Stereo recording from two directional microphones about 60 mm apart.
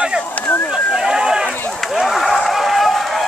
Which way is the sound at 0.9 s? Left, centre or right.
Centre.